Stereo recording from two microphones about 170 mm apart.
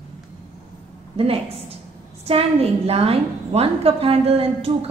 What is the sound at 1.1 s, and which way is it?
A woman's voice, 35° right (ahead or behind).